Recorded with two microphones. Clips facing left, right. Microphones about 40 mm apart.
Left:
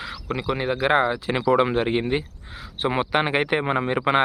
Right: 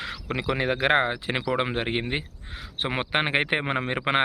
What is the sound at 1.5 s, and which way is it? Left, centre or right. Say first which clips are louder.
Speech: left 6 dB; right.